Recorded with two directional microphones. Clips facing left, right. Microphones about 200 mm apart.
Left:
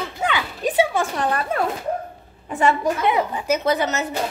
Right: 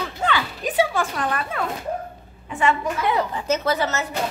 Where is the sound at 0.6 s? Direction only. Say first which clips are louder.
Left 4 dB; 25° left (ahead or behind).